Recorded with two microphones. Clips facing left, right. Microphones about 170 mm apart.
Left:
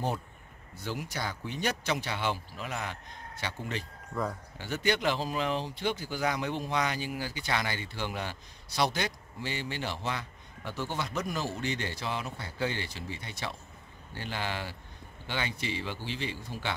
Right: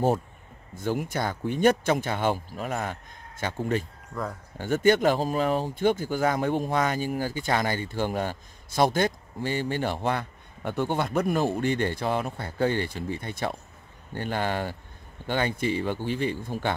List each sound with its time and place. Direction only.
0.7 s speech: 50° right (ahead or behind)
4.1 s speech: centre (ahead or behind)
4.6 s speech: 50° right (ahead or behind)